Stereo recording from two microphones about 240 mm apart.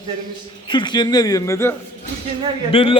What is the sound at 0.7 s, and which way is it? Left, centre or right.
A man's voice, centre.